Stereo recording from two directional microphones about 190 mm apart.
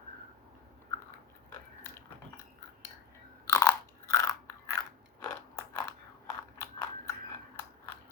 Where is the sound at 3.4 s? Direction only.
15° left (ahead or behind).